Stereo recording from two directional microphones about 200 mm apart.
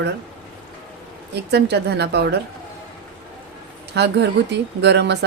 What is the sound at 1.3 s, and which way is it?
Speech, 55° right (ahead or behind).